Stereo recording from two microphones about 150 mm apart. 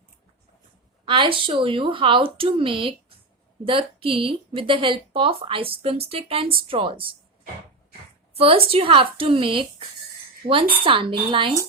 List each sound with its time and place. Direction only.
1.0 s a woman's voice: 35° right (ahead or behind)
8.4 s a woman's voice: 40° right (ahead or behind)